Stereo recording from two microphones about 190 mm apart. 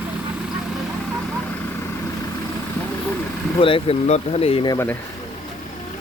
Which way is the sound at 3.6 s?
30° left (ahead or behind).